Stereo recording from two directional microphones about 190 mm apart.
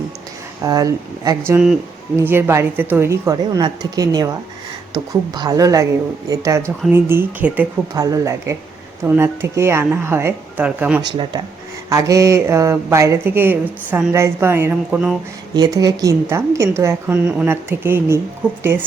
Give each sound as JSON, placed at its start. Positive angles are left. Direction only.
{"t": 0.6, "sound": "a woman's voice", "side_deg": -20}
{"t": 1.5, "sound": "a woman's voice", "side_deg": -5}
{"t": 11.9, "sound": "a woman's voice", "side_deg": -15}
{"t": 15.5, "sound": "a woman's voice", "side_deg": -20}